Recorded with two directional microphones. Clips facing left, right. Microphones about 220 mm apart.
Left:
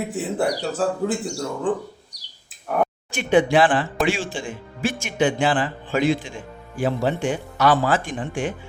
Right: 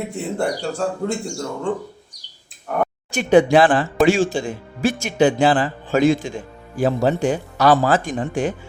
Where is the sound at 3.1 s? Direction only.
40° right (ahead or behind).